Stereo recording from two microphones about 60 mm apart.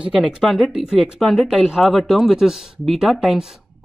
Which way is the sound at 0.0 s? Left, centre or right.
Centre.